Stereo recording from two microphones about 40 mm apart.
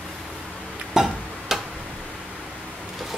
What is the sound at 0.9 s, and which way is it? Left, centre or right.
Music, centre.